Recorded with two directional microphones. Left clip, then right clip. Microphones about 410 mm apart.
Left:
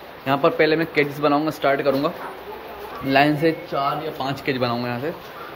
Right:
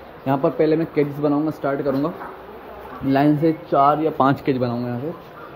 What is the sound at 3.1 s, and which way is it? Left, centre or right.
A man's voice, centre.